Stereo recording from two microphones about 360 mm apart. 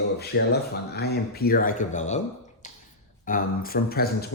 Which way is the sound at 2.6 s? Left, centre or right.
Left.